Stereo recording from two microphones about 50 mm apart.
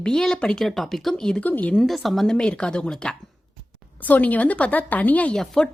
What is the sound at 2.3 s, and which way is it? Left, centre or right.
Speech, centre.